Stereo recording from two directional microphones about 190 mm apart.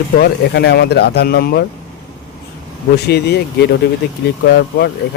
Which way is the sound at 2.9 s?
60° left (ahead or behind).